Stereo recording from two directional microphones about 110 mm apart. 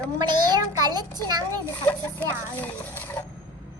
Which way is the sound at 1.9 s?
15° left (ahead or behind).